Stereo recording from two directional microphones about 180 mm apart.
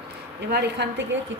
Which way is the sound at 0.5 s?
70° right (ahead or behind).